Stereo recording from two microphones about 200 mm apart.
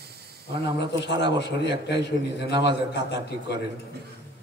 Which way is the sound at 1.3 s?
60° left (ahead or behind).